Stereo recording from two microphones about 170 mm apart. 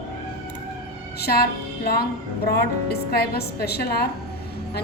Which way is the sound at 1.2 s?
70° left (ahead or behind).